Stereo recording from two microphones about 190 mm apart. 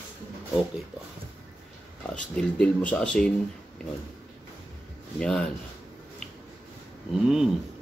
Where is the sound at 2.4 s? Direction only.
5° left (ahead or behind).